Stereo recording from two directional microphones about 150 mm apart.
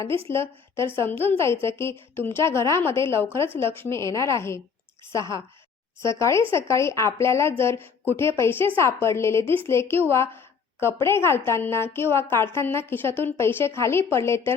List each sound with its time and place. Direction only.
0.3 s a woman's voice: 15° left (ahead or behind)
6.0 s a woman's voice: 20° left (ahead or behind)